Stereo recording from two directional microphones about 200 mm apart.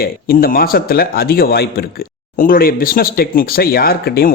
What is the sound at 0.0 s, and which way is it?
A man's voice, 50° left (ahead or behind).